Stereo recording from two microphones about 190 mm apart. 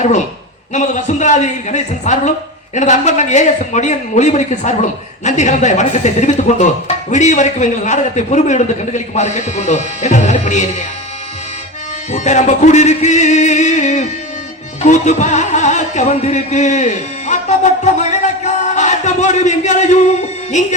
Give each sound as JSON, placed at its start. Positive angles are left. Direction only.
{"t": 0.7, "sound": "speech", "side_deg": 40}
{"t": 12.1, "sound": "speech", "side_deg": 40}
{"t": 14.8, "sound": "music", "side_deg": 40}